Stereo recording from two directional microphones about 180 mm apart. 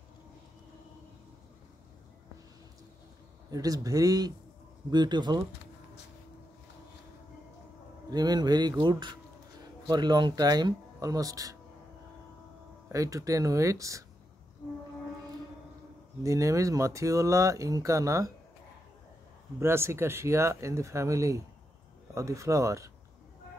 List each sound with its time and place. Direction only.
3.4 s speech: 20° right (ahead or behind)
8.1 s speech: 20° right (ahead or behind)
12.8 s speech: 15° right (ahead or behind)
16.2 s speech: 15° right (ahead or behind)
19.6 s speech: 15° right (ahead or behind)